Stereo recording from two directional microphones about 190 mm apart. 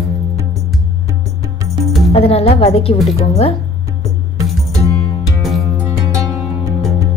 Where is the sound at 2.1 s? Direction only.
30° left (ahead or behind).